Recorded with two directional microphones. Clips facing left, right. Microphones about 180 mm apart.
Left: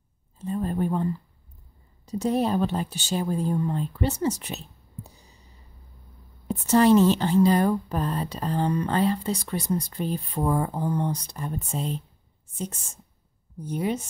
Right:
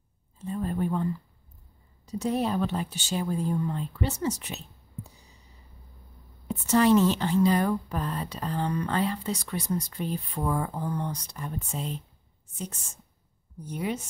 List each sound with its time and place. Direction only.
0.5 s a sound: 35° left (ahead or behind)
2.1 s a woman's voice: 35° left (ahead or behind)
6.4 s a woman's voice: 35° left (ahead or behind)
13.7 s a woman's voice: 30° left (ahead or behind)